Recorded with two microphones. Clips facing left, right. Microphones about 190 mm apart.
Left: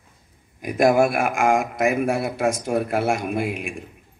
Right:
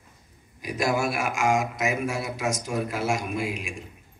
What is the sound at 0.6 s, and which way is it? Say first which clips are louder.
Speech: left 9 dB; 55° left (ahead or behind).